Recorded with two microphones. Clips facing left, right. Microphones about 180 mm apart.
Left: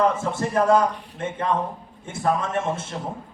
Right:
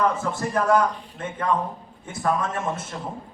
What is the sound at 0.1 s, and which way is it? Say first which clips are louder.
Speech: left 1 dB; 25° left (ahead or behind).